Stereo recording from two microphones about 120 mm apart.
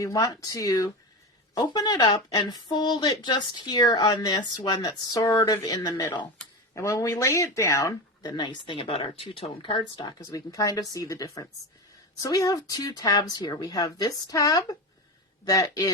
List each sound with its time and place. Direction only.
0.0 s a woman's voice: 30° left (ahead or behind)